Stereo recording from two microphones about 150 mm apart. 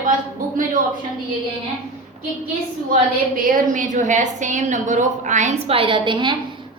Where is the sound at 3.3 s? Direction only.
60° right (ahead or behind).